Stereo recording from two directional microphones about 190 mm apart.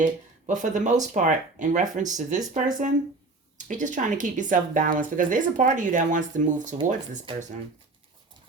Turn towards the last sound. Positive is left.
turn(degrees=-40)  # may be behind; listen again after turning